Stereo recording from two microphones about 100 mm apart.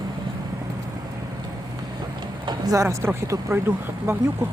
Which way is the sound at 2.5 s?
35° right (ahead or behind).